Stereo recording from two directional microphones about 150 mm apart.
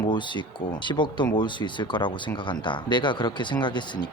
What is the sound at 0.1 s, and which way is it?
Speech, 30° left (ahead or behind).